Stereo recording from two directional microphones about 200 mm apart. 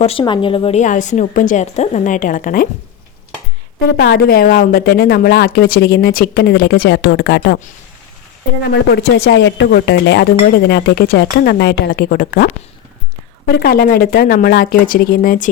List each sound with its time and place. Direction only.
0.0 s a woman's voice: 25° left (ahead or behind); by 2.6 s 40° left (ahead or behind)
3.8 s speech: 50° left (ahead or behind)
8.7 s speech: 55° left (ahead or behind)